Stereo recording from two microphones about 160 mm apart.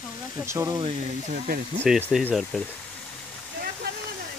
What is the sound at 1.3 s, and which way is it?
Speech, 60° right (ahead or behind).